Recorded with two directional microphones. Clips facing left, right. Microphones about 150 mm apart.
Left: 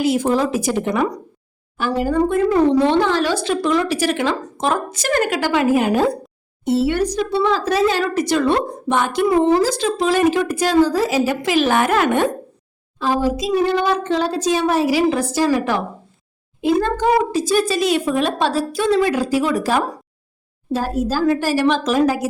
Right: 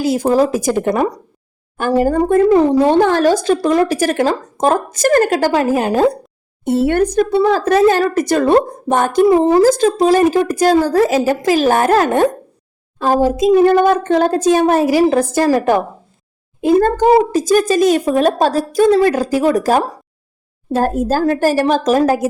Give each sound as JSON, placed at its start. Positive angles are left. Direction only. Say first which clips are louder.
{"t": 0.0, "sound": "a woman's voice", "louder": "right 4 dB", "side_deg": -35}
{"t": 6.7, "sound": "a woman's voice", "louder": "right 3 dB", "side_deg": -55}
{"t": 9.3, "sound": "a woman's voice", "louder": "even", "side_deg": -35}
{"t": 9.6, "sound": "a woman's voice", "louder": "right 7 dB", "side_deg": -45}
{"t": 11.3, "sound": "a woman's voice", "louder": "right 4 dB", "side_deg": -40}